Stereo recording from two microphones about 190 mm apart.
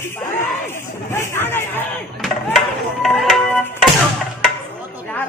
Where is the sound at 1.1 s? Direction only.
15° left (ahead or behind).